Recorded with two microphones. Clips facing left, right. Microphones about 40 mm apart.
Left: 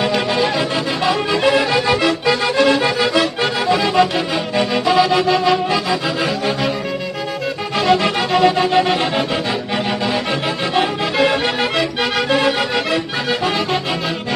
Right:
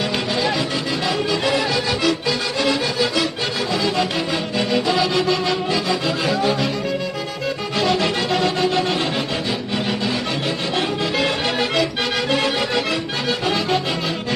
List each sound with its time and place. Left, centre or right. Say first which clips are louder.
1.3 s music: left 6 dB; left
4.6 s music: left 5 dB; centre
7.7 s music: left 5 dB; centre
8.7 s music: left 5 dB; left
10.7 s music: left 4 dB; centre